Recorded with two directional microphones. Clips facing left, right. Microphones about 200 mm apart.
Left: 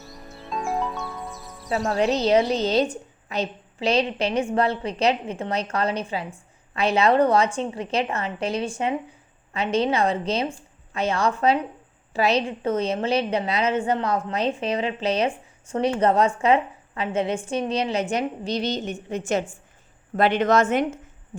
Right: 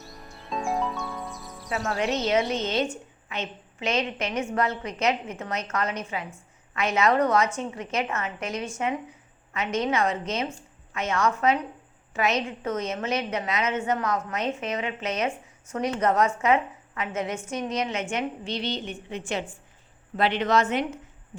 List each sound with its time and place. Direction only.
0.6 s music: centre (ahead or behind)
1.9 s a woman's voice: 30° left (ahead or behind); by 21.0 s 50° left (ahead or behind)